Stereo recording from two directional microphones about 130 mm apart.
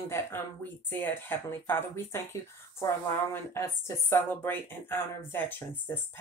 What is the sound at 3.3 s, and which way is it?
Speech, 20° left (ahead or behind).